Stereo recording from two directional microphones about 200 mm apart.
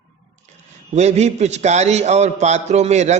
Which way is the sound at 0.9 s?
35° right (ahead or behind).